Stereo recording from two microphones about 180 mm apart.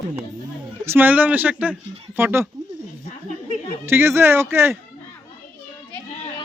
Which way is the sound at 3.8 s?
15° right (ahead or behind).